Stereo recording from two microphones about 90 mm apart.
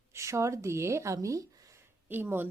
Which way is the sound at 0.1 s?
35° right (ahead or behind).